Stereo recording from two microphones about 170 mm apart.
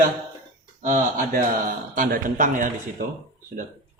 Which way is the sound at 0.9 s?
50° right (ahead or behind).